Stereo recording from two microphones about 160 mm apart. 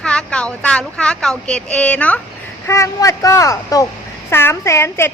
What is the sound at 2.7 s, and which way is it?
Speech, 20° left (ahead or behind).